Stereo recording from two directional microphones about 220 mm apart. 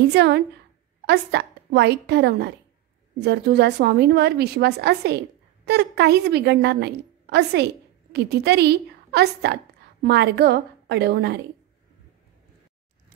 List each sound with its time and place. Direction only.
0.1 s a woman's voice: 50° right (ahead or behind)